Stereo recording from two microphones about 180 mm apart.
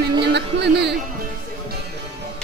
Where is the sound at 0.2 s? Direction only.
70° right (ahead or behind).